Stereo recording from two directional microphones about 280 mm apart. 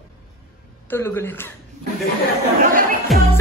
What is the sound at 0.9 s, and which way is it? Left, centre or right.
Music, centre.